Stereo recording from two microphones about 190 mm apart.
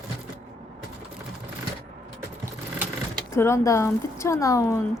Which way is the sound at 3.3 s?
15° left (ahead or behind).